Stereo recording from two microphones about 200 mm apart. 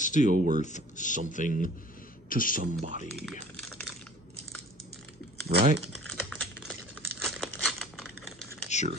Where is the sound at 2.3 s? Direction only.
45° left (ahead or behind).